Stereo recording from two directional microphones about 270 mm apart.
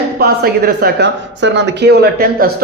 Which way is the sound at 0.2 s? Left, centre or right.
Right.